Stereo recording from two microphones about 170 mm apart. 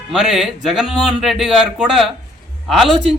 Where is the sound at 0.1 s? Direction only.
5° right (ahead or behind).